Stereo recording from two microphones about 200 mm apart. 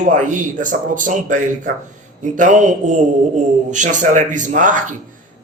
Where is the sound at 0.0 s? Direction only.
40° right (ahead or behind).